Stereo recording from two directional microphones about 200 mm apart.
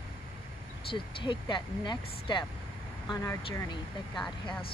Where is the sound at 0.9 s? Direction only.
25° left (ahead or behind).